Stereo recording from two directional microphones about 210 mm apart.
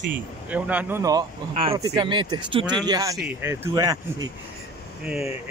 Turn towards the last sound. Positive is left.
turn(degrees=-5)  # may be behind; listen again after turning